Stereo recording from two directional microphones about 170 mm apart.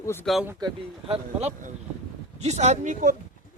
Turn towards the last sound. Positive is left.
turn(degrees=-45)  # may be behind; listen again after turning